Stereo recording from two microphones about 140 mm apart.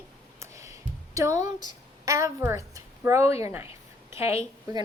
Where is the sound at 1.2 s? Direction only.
25° right (ahead or behind).